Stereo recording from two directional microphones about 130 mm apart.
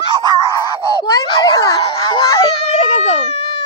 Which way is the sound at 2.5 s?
55° left (ahead or behind).